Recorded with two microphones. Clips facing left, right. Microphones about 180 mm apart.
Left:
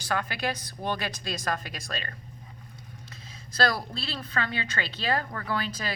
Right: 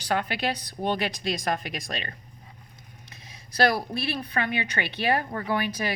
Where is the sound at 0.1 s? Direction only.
20° right (ahead or behind).